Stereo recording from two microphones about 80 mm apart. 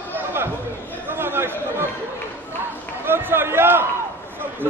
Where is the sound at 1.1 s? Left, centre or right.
Right.